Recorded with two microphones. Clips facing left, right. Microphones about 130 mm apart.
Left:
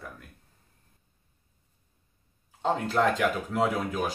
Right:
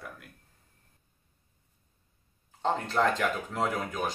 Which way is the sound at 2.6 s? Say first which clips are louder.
Left 2 dB; 5° left (ahead or behind).